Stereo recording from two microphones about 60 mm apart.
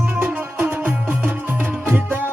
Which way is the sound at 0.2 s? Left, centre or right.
Right.